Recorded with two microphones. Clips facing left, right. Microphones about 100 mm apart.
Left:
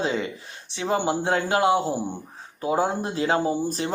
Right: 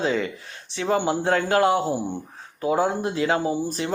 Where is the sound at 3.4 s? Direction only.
15° right (ahead or behind).